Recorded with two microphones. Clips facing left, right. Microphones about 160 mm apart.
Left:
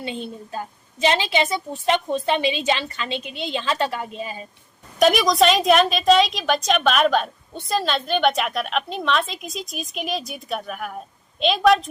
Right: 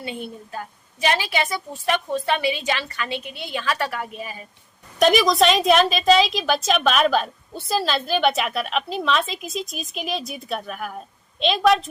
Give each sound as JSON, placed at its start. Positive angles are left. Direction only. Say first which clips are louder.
{"t": 0.0, "sound": "a woman's voice", "louder": "left 2 dB", "side_deg": 20}
{"t": 4.9, "sound": "a woman's voice", "louder": "even", "side_deg": 0}